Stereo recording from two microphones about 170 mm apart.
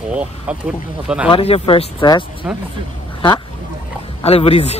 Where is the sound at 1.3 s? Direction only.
35° left (ahead or behind).